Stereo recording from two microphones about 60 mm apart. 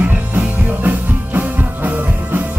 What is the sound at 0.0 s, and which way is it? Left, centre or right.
Music, right.